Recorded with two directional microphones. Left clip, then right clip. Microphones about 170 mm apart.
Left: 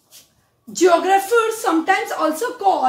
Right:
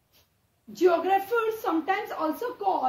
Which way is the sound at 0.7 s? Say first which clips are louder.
Left 8 dB; 5° left (ahead or behind).